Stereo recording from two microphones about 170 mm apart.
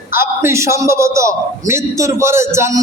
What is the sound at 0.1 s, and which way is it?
A man's voice, 15° right (ahead or behind).